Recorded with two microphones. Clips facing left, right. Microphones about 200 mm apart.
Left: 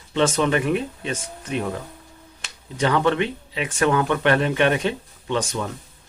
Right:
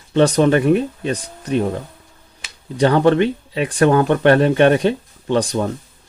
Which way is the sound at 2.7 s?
35° right (ahead or behind).